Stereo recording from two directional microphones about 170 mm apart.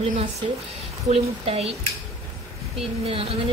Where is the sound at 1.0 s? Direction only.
35° right (ahead or behind).